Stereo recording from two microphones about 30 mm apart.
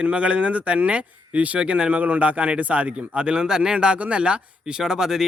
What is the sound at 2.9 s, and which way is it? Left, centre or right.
Speech, right.